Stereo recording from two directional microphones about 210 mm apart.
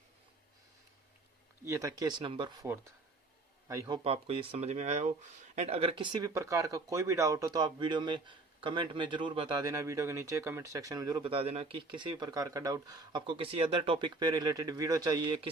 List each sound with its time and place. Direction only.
1.6 s speech: 15° right (ahead or behind)